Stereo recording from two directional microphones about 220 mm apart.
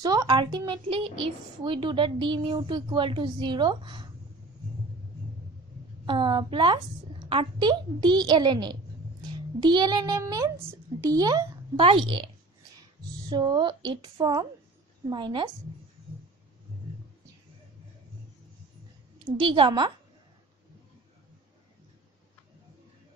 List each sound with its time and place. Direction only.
0.0 s a woman's voice: 15° right (ahead or behind)
6.0 s a woman's voice: 20° right (ahead or behind)
13.3 s a woman's voice: 20° right (ahead or behind)
19.4 s a woman's voice: 25° right (ahead or behind)